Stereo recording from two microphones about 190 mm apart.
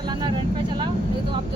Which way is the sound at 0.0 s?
25° right (ahead or behind).